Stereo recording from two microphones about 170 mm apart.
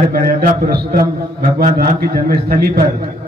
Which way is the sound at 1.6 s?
55° right (ahead or behind).